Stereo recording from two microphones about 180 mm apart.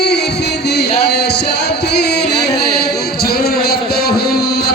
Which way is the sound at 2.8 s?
65° left (ahead or behind).